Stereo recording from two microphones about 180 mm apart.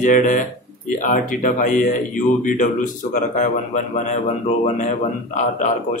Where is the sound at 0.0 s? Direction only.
45° left (ahead or behind).